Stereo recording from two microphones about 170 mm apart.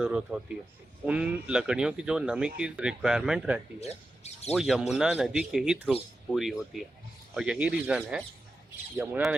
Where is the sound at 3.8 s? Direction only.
40° left (ahead or behind).